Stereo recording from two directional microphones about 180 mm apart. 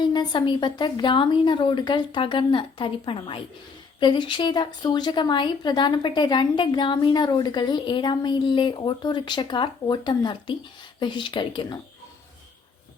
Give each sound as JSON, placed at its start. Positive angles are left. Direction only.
{"t": 0.0, "sound": "a woman's voice", "side_deg": 25}